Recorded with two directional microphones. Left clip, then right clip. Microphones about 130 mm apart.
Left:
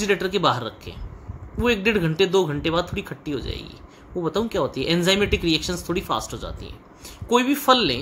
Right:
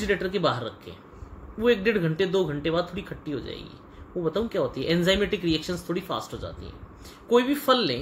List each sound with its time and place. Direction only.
0.0 s speech: 90° left
1.6 s speech: 70° left (ahead or behind)
7.2 s speech: 65° left (ahead or behind)